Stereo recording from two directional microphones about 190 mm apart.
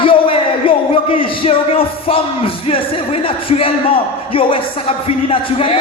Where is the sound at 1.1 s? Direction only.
30° left (ahead or behind).